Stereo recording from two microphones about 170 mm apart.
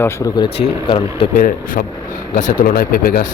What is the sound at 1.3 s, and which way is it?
Speech, 55° left (ahead or behind).